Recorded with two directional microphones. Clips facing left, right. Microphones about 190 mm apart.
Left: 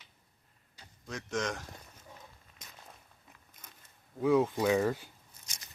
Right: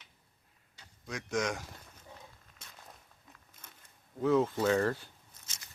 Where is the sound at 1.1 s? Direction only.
Centre (ahead or behind).